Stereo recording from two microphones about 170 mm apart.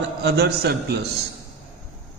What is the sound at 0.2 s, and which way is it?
Speech, 75° right (ahead or behind).